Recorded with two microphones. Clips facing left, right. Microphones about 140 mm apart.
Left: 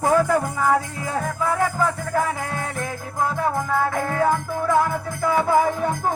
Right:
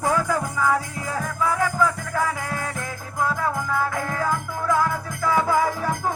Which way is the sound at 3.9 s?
30° left (ahead or behind).